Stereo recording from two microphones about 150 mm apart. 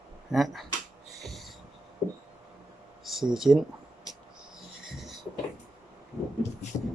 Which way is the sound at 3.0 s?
Centre (ahead or behind).